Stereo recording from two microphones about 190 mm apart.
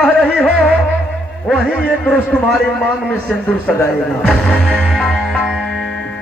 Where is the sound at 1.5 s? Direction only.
Centre (ahead or behind).